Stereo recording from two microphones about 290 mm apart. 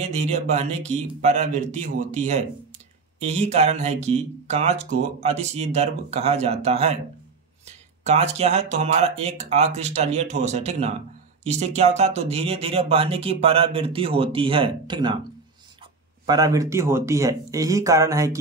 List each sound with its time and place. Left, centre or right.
0.0 s speech: right
8.1 s speech: right
16.3 s speech: centre